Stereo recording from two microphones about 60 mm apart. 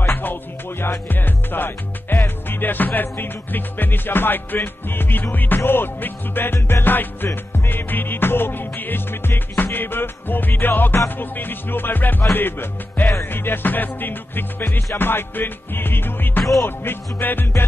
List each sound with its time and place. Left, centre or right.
0.0 s music: left